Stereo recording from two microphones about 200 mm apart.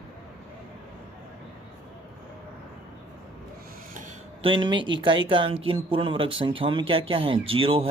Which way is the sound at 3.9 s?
35° right (ahead or behind).